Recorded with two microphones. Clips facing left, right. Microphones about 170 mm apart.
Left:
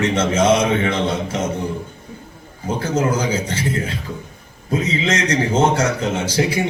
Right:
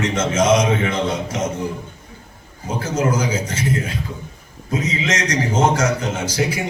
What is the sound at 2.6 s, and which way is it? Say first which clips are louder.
A man's voice: left 1 dB; 30° left (ahead or behind).